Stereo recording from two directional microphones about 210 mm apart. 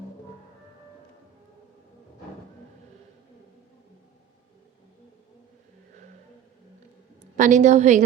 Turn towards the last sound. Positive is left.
turn(degrees=-35)  # may be behind; listen again after turning